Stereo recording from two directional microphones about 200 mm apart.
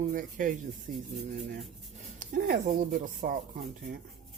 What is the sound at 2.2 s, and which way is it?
Speech, 45° right (ahead or behind).